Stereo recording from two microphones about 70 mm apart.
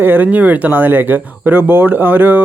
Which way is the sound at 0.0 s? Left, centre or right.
Right.